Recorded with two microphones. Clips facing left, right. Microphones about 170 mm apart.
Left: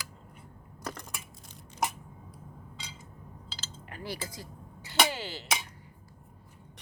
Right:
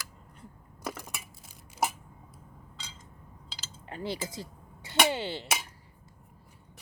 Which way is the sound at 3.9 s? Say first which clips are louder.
Right 4 dB; 25° right (ahead or behind).